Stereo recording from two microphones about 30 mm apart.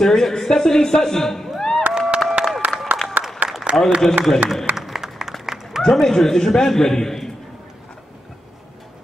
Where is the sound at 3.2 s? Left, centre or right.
Right.